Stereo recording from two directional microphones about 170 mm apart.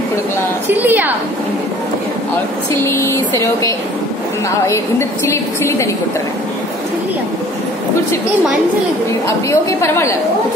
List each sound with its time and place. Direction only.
0.7 s a woman's voice: 10° right (ahead or behind)
2.7 s a woman's voice: 15° left (ahead or behind)
9.5 s a woman's voice: 15° left (ahead or behind)